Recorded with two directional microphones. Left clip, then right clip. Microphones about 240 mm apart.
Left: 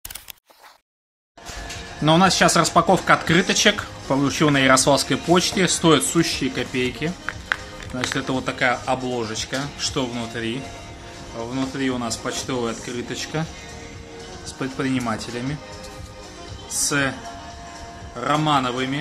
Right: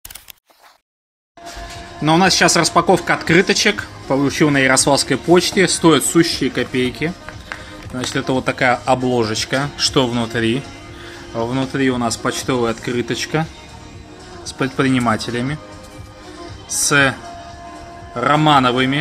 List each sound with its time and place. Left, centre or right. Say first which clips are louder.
2.0 s speech: right 3 dB; centre
8.5 s speech: right 5 dB; right
18.1 s speech: right 7 dB; centre